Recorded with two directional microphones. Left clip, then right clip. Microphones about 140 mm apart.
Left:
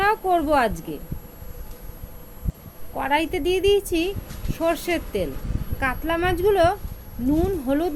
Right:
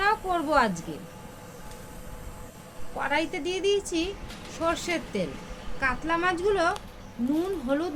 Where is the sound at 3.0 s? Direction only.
90° left.